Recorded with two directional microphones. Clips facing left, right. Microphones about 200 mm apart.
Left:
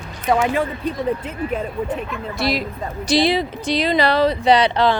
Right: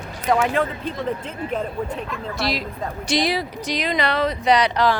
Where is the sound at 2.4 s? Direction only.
55° left (ahead or behind).